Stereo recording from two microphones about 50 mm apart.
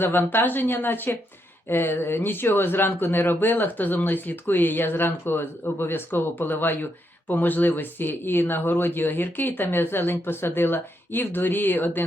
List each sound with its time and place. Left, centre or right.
0.0 s speech: left